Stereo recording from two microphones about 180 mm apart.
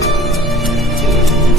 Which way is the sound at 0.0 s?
Centre (ahead or behind).